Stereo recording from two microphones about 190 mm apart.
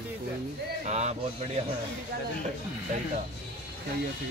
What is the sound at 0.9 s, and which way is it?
Speech, 35° right (ahead or behind).